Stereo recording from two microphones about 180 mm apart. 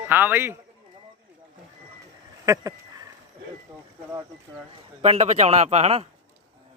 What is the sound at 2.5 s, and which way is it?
Speech, 20° right (ahead or behind).